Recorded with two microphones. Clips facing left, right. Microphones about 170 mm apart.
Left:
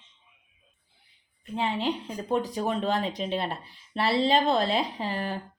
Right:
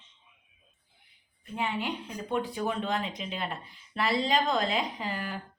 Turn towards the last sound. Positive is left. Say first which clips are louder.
# left 4 dB
turn(degrees=30)  # may be behind; listen again after turning